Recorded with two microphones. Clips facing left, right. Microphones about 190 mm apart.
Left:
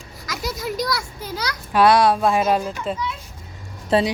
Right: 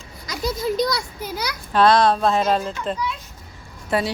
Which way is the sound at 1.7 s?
10° left (ahead or behind).